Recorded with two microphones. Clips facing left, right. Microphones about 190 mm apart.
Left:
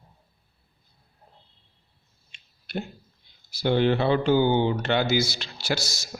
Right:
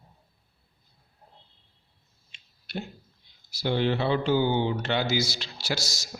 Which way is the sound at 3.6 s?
55° left (ahead or behind).